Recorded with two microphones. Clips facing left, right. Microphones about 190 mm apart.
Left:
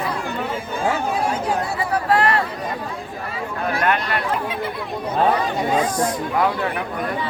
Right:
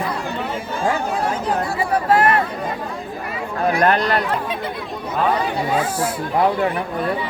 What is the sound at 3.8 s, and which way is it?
Speech, 40° right (ahead or behind).